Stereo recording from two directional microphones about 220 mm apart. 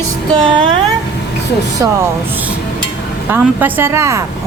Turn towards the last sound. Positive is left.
turn(degrees=-10)  # may be behind; listen again after turning